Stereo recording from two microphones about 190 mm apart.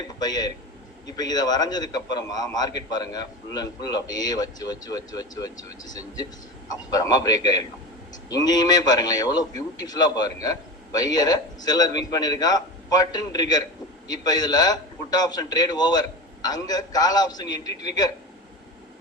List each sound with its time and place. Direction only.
0.2 s a man's voice: 20° left (ahead or behind)